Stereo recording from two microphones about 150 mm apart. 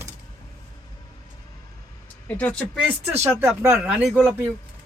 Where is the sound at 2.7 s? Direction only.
10° right (ahead or behind).